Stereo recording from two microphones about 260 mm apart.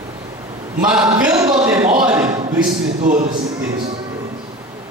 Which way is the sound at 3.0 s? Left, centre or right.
Right.